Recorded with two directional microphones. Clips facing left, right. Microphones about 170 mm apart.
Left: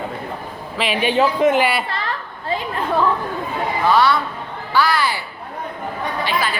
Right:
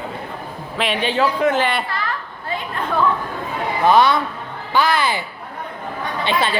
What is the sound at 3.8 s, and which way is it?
A woman's voice, 20° right (ahead or behind).